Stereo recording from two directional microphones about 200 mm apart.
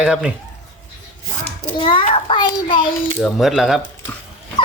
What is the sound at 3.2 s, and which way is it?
Speech, centre (ahead or behind).